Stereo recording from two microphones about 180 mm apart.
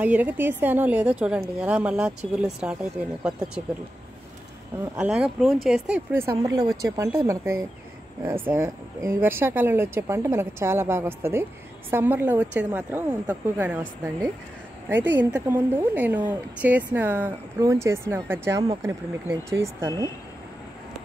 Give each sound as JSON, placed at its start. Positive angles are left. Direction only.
{"t": 0.0, "sound": "speech", "side_deg": -10}
{"t": 4.9, "sound": "speech", "side_deg": -5}